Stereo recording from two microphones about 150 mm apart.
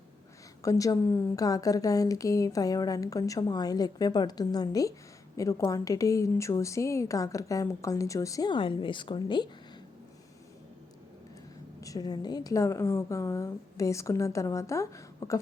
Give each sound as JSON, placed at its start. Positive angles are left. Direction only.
{"t": 0.6, "sound": "a woman's voice", "side_deg": 20}
{"t": 11.8, "sound": "a woman's voice", "side_deg": 25}